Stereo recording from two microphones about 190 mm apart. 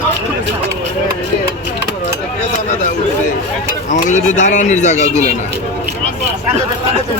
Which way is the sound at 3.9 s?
40° left (ahead or behind).